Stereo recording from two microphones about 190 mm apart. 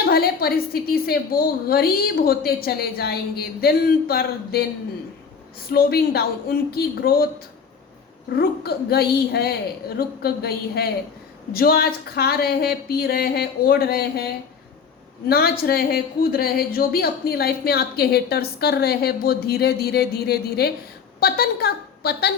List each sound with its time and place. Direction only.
0.0 s a woman's voice: 55° left (ahead or behind)